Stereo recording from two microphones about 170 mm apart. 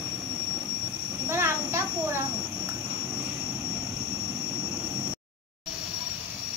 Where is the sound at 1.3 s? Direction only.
15° right (ahead or behind).